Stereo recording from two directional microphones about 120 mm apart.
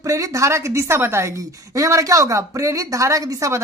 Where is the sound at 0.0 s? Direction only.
30° right (ahead or behind).